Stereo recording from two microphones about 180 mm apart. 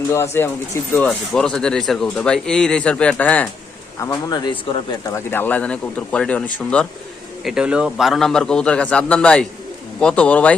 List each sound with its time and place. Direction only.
0.1 s speech: 15° left (ahead or behind)
5.3 s speech: 10° left (ahead or behind)
7.4 s speech: 5° right (ahead or behind)